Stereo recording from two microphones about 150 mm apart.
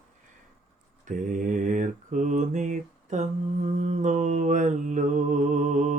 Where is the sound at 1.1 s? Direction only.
60° right (ahead or behind).